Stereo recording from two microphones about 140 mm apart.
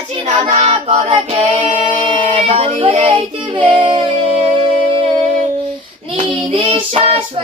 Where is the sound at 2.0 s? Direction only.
40° right (ahead or behind).